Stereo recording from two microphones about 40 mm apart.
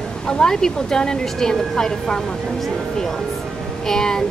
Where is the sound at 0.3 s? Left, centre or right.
Centre.